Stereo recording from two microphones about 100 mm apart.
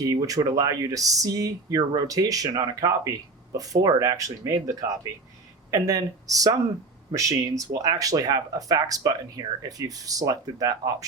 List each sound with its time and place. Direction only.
0.0 s speech: 40° right (ahead or behind)